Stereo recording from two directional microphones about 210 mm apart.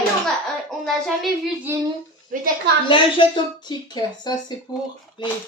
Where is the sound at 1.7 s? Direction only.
10° right (ahead or behind).